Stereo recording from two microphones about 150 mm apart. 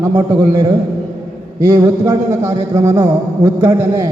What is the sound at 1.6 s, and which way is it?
A man's voice, 20° right (ahead or behind).